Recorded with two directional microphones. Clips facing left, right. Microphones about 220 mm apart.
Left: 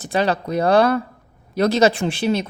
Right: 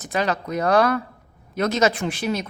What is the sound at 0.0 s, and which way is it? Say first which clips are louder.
A woman's voice: left 4 dB; 30° left (ahead or behind).